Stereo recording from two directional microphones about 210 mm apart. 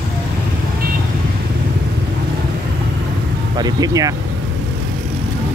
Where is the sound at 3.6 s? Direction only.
20° right (ahead or behind).